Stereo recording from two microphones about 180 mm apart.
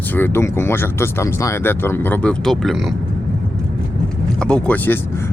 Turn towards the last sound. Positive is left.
turn(degrees=10)  # may be behind; listen again after turning